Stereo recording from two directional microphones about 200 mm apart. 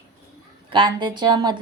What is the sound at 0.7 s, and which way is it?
Speech, 25° right (ahead or behind).